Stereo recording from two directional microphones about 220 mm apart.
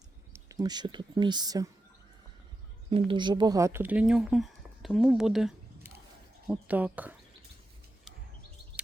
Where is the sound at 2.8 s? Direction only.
25° right (ahead or behind); by 7.1 s 5° right (ahead or behind).